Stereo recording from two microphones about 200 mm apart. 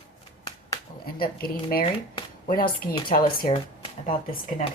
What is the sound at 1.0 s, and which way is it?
Speech, 45° left (ahead or behind).